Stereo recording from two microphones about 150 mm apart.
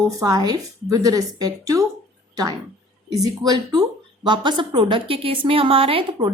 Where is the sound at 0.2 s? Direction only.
25° right (ahead or behind).